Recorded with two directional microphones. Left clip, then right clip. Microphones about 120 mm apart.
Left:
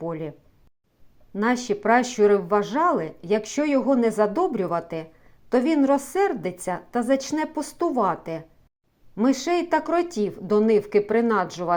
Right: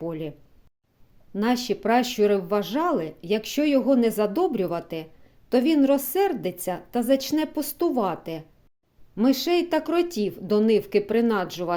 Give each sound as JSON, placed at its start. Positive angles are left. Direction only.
{"t": 0.0, "sound": "speech", "side_deg": -20}